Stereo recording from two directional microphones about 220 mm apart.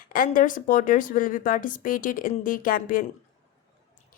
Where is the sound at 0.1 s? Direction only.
40° left (ahead or behind).